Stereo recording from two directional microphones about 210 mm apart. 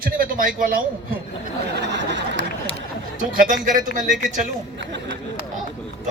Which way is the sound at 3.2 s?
40° right (ahead or behind).